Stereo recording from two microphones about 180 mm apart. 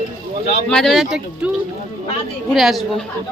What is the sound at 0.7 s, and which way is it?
Speech, centre (ahead or behind).